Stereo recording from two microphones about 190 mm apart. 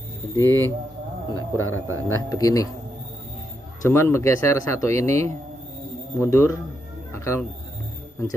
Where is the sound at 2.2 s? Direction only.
20° left (ahead or behind).